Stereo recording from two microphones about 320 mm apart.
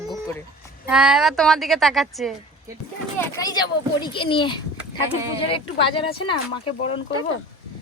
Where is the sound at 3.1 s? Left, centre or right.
Centre.